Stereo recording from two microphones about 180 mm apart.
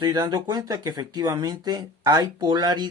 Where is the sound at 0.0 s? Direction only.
20° right (ahead or behind).